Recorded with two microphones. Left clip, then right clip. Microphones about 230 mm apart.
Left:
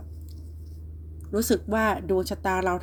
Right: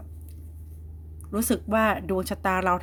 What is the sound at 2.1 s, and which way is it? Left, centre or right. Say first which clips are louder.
Speech: left 1 dB; right.